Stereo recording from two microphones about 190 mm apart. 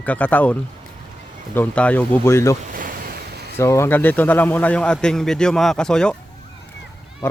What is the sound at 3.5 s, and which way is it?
A man's voice, 15° left (ahead or behind).